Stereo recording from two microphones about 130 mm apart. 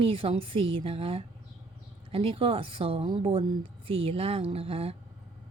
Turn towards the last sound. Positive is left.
turn(degrees=-50)  # may be behind; listen again after turning